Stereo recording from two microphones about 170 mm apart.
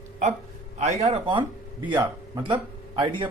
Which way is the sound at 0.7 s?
40° right (ahead or behind).